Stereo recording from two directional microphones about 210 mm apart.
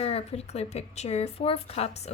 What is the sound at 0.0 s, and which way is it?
A woman's voice, 30° left (ahead or behind).